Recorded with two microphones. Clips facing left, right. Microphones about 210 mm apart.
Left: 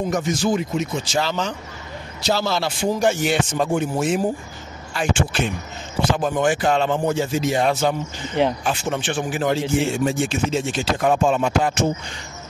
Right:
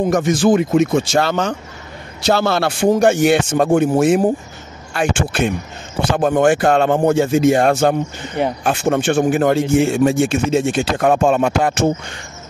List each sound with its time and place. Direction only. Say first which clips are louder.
0.4 s speech: right 8 dB; 50° right (ahead or behind)